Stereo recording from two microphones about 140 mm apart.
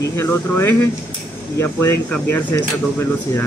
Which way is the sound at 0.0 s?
20° left (ahead or behind).